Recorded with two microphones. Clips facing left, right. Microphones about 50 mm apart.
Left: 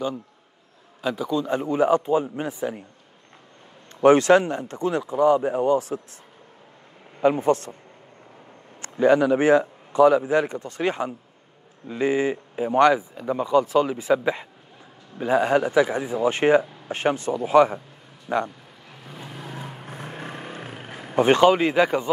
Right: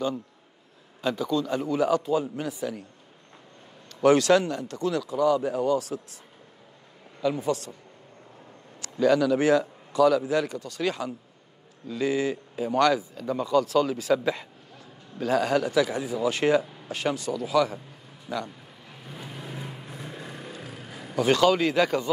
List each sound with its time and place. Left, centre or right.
1.0 s speech: centre; by 2.8 s left
4.0 s speech: left
7.2 s speech: left
8.8 s speech: left
18.9 s vehicle: centre
19.5 s vehicle: left